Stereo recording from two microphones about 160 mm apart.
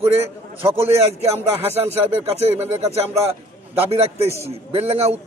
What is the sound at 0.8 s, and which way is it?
Speech, 40° right (ahead or behind).